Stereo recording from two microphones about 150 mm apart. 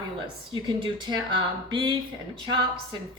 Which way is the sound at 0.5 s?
30° right (ahead or behind).